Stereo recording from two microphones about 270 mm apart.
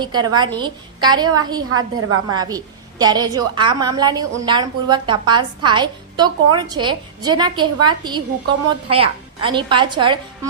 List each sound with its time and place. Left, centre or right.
0.0 s a woman's voice: centre
1.7 s a woman's voice: right
2.3 s a woman's voice: centre